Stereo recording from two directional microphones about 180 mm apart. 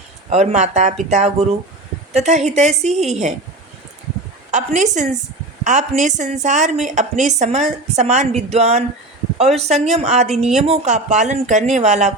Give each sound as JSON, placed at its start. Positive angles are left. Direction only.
{"t": 0.3, "sound": "speech", "side_deg": -40}
{"t": 4.5, "sound": "speech", "side_deg": -40}